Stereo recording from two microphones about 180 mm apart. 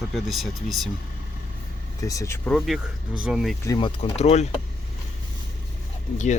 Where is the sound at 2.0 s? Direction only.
20° left (ahead or behind).